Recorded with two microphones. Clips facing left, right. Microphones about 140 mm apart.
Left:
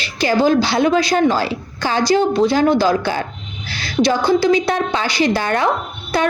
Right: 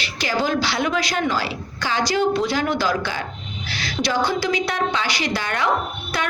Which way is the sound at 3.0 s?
45° left (ahead or behind).